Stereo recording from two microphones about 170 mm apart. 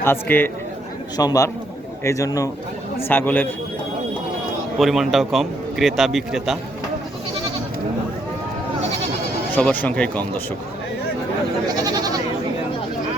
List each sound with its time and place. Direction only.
0.0 s speech: 10° left (ahead or behind)
1.1 s a man's voice: 20° left (ahead or behind)
4.8 s a man's voice: centre (ahead or behind)
9.6 s speech: 5° left (ahead or behind)
11.8 s goat: 25° right (ahead or behind)